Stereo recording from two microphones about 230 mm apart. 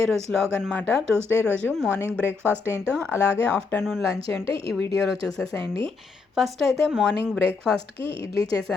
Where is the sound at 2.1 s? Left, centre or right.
Centre.